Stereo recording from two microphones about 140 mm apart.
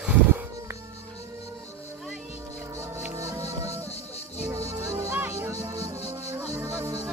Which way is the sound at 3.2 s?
25° right (ahead or behind).